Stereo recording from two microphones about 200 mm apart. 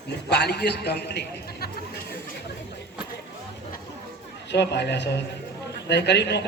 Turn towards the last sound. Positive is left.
turn(degrees=55)  # may be behind; listen again after turning